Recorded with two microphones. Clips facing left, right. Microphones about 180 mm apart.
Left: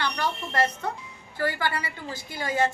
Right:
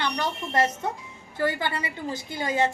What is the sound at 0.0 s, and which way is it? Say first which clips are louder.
A woman's voice: right 1 dB; 20° right (ahead or behind).